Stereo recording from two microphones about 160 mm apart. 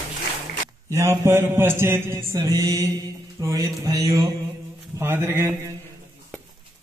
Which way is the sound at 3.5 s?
20° right (ahead or behind).